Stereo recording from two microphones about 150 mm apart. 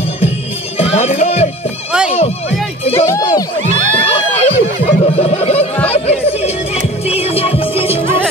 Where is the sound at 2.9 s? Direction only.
20° left (ahead or behind).